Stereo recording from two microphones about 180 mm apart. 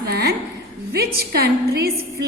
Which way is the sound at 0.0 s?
65° right (ahead or behind).